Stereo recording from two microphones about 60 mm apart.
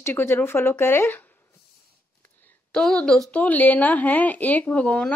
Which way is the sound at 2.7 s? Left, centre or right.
Centre.